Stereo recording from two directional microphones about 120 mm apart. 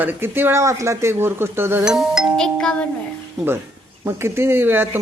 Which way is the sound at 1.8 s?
5° right (ahead or behind).